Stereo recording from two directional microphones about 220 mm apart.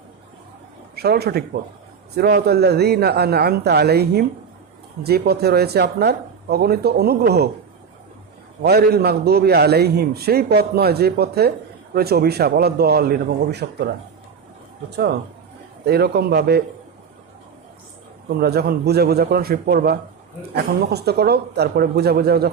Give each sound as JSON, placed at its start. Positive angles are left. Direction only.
{"t": 0.9, "sound": "a man's voice", "side_deg": -45}
{"t": 8.6, "sound": "a man's voice", "side_deg": -45}
{"t": 18.3, "sound": "a man's voice", "side_deg": -45}